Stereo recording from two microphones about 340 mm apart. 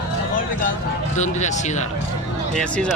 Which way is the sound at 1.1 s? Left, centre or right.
Left.